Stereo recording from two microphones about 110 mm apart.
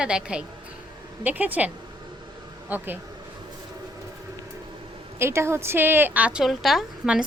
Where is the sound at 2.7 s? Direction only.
15° right (ahead or behind).